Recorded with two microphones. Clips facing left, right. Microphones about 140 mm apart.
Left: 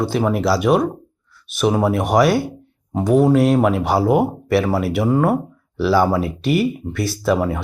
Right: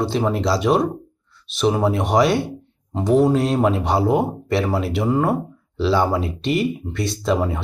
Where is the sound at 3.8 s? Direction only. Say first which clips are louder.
Left 2 dB; centre (ahead or behind).